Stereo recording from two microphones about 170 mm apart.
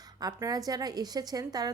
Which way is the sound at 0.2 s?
20° right (ahead or behind).